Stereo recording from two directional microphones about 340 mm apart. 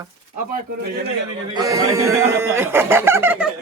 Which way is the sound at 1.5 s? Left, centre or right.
Centre.